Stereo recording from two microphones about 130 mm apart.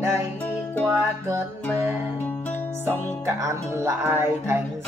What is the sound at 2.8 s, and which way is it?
Music, 20° right (ahead or behind).